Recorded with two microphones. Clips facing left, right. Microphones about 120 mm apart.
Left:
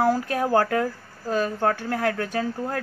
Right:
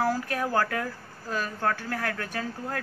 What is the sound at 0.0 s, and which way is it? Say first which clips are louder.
A woman's voice: left 5 dB; 20° left (ahead or behind).